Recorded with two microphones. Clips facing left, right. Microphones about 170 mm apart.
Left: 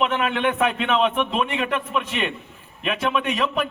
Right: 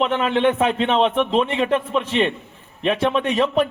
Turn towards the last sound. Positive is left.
turn(degrees=-30)  # may be behind; listen again after turning